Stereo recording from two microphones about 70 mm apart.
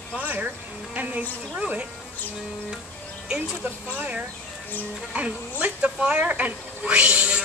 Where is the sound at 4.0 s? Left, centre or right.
Centre.